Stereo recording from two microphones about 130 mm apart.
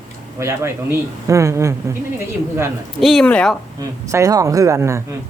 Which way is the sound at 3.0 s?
Centre (ahead or behind).